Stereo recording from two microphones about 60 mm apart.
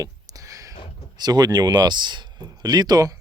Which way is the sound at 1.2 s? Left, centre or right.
Right.